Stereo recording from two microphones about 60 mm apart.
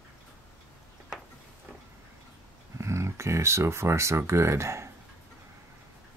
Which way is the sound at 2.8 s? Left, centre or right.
Right.